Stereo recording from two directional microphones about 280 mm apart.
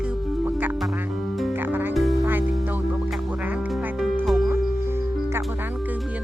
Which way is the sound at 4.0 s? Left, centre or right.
Centre.